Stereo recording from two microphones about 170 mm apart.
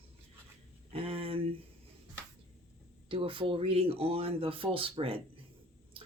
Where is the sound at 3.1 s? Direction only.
30° right (ahead or behind).